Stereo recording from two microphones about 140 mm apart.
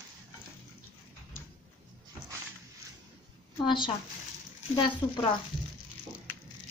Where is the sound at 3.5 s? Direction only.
35° left (ahead or behind).